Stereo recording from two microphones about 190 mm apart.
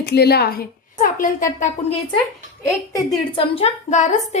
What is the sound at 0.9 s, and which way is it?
A woman's voice, 45° left (ahead or behind).